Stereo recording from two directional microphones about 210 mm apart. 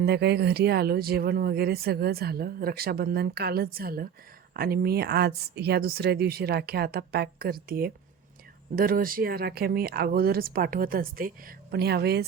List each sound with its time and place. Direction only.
0.0 s speech: 50° right (ahead or behind)